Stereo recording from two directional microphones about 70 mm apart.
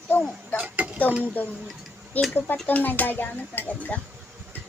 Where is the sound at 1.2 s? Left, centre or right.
Left.